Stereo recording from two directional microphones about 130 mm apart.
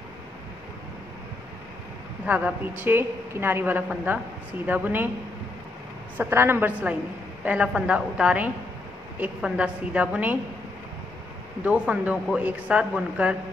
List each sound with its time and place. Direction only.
2.2 s a woman's voice: 10° right (ahead or behind)
6.1 s a woman's voice: 20° right (ahead or behind)
11.6 s a woman's voice: 10° right (ahead or behind)